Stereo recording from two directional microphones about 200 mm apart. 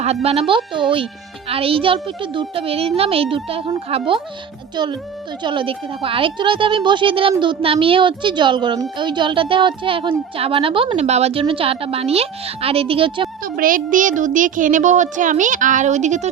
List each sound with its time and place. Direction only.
0.0 s a child's voice: 30° right (ahead or behind)
13.4 s a child's voice: 45° right (ahead or behind)